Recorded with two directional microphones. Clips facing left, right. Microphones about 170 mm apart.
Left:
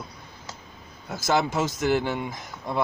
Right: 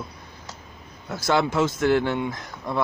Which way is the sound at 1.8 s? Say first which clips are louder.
Right 2 dB; 5° left (ahead or behind).